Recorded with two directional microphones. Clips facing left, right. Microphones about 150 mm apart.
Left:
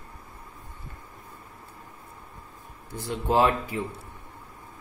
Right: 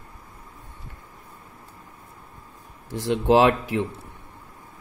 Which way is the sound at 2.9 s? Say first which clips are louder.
Right 7 dB; 90° right.